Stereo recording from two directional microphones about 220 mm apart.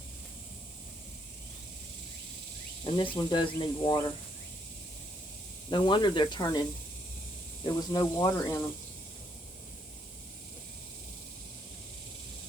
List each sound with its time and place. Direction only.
2.8 s speech: 20° left (ahead or behind)
5.7 s speech: 20° left (ahead or behind)